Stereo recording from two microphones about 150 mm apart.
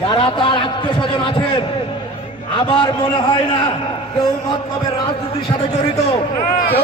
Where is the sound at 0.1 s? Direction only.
35° left (ahead or behind).